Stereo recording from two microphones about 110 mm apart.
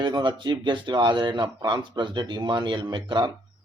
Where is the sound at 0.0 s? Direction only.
45° right (ahead or behind).